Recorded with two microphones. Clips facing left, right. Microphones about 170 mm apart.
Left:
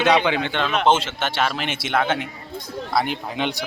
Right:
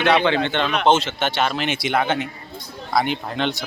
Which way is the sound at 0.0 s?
20° left (ahead or behind).